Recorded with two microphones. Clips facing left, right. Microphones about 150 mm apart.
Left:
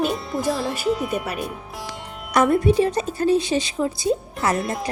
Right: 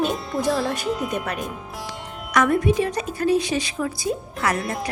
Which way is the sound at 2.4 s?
30° left (ahead or behind).